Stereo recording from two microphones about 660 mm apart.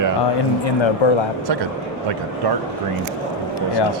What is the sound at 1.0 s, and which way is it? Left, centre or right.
Speech, left.